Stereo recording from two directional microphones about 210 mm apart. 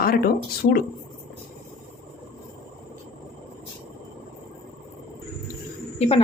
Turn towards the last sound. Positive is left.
turn(degrees=25)  # may be behind; listen again after turning